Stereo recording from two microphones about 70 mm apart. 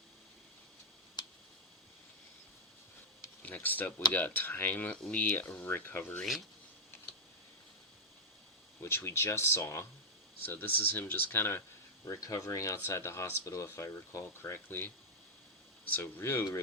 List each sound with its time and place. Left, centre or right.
1.2 s a sound: left
3.4 s speech: left
8.8 s speech: left
10.4 s speech: left
12.0 s speech: left
16.0 s speech: left